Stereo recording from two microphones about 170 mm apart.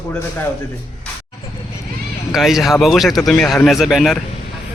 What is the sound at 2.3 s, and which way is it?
A man's voice, centre (ahead or behind).